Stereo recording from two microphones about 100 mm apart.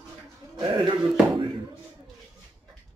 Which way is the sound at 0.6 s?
55° right (ahead or behind).